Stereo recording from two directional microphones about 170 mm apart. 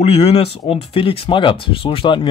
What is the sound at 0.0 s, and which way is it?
Speech, 35° left (ahead or behind).